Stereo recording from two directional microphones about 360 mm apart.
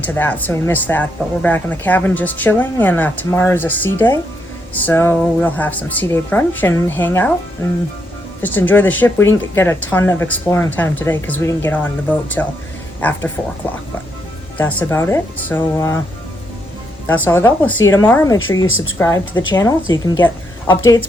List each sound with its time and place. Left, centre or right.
0.0 s speech: centre
8.4 s speech: centre
14.6 s speech: centre
17.2 s a woman's voice: centre
18.6 s speech: left
18.9 s a woman's voice: centre